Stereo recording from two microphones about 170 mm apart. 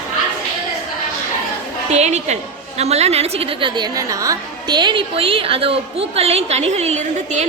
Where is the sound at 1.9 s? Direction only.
40° right (ahead or behind).